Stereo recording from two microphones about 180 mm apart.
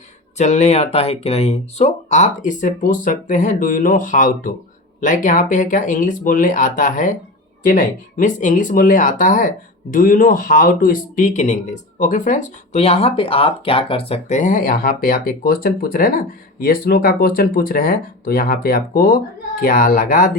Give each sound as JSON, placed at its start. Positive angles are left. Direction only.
{"t": 0.3, "sound": "speech", "side_deg": 40}